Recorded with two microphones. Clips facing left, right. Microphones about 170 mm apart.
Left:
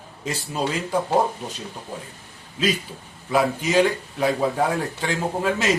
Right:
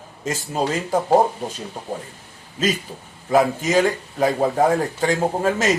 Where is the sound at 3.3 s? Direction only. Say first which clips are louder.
Right 2 dB; 45° right (ahead or behind).